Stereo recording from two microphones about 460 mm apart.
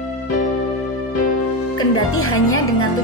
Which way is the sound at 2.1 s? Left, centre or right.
Left.